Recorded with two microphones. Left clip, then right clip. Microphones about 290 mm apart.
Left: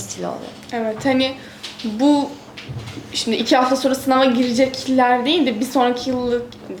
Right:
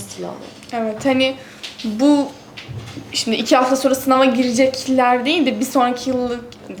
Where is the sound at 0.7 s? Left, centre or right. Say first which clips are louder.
Right 1 dB; right.